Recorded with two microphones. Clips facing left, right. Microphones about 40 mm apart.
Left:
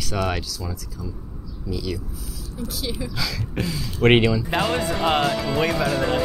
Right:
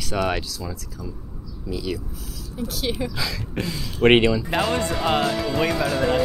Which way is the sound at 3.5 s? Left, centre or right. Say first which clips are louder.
Left 2 dB; centre.